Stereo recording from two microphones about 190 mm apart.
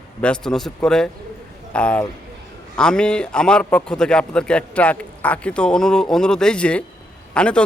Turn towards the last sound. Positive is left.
turn(degrees=5)  # may be behind; listen again after turning